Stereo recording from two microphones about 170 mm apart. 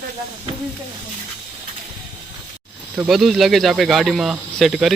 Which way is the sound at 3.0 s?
Centre (ahead or behind).